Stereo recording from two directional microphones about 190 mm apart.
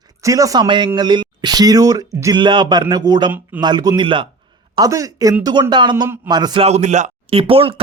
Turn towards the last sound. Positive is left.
turn(degrees=-30)  # may be behind; listen again after turning